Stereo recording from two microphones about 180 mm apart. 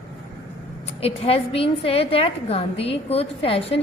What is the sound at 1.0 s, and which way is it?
A woman's voice, 30° left (ahead or behind).